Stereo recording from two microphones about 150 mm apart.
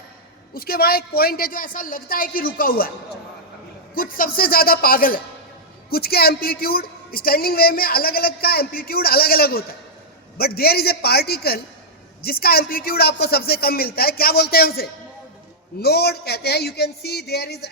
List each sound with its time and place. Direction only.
0.5 s a woman's voice: 90° left; by 2.9 s 75° left (ahead or behind)
3.9 s a woman's voice: 70° left (ahead or behind)
5.9 s a woman's voice: 90° left